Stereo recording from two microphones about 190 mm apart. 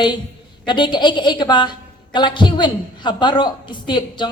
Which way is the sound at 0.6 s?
25° left (ahead or behind).